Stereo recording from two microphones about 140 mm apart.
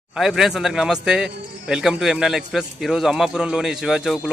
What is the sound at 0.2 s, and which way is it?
Speech, centre (ahead or behind).